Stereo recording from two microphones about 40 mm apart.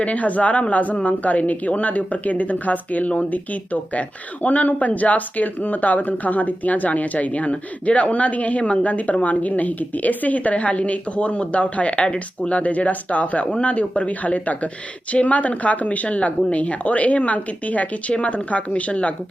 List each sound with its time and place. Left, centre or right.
0.0 s speech: left